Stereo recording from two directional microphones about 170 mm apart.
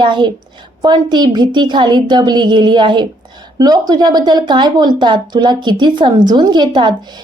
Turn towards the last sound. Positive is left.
turn(degrees=-25)  # may be behind; listen again after turning